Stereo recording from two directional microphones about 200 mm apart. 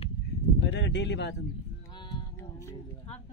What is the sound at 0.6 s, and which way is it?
Speech, 60° left (ahead or behind).